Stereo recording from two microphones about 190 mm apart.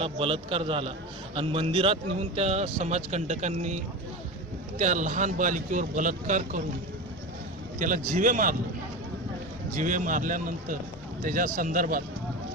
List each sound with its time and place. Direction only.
0.0 s a man's voice: 30° right (ahead or behind)
4.8 s a man's voice: 40° right (ahead or behind)
7.8 s a man's voice: 45° right (ahead or behind)
9.7 s a man's voice: 45° right (ahead or behind)